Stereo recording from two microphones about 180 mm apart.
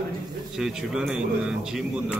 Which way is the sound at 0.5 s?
5° right (ahead or behind).